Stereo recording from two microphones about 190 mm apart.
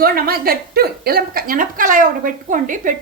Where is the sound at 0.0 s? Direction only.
50° right (ahead or behind).